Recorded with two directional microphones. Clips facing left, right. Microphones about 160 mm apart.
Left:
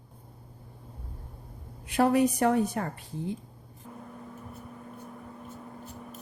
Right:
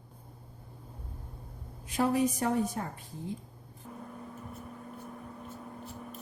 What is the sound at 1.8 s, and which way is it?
A woman's voice, 65° left (ahead or behind).